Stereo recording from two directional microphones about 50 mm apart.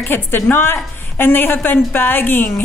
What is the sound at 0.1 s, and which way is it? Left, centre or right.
A woman's voice, left.